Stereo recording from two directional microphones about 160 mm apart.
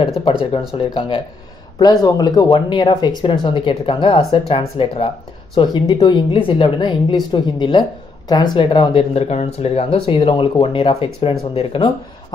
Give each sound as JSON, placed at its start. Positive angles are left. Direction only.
{"t": 0.2, "sound": "a woman's voice", "side_deg": 35}